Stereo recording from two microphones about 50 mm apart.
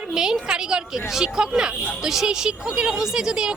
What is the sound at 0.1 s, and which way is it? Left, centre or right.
Speech, centre.